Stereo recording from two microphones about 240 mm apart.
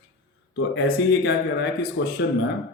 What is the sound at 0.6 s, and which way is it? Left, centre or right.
Speech, left.